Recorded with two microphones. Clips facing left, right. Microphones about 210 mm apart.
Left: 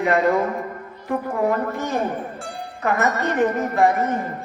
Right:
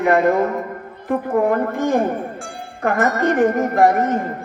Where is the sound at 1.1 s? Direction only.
55° right (ahead or behind).